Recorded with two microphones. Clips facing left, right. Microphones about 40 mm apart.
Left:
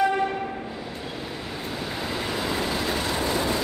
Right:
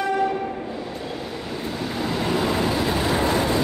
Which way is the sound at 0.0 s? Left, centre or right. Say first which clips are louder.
Right 1 dB; centre.